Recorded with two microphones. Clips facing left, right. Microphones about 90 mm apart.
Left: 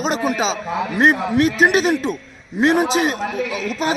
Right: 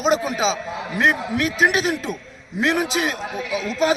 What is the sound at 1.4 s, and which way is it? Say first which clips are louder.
A man's voice: left 5 dB; 25° left (ahead or behind).